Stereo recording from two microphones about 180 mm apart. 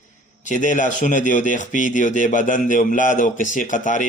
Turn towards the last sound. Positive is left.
turn(degrees=45)  # may be behind; listen again after turning